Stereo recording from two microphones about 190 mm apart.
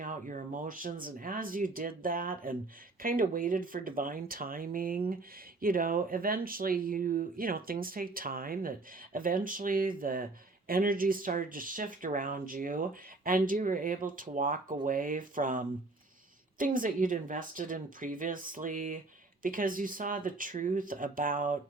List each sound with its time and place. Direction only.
0.0 s speech: 45° right (ahead or behind)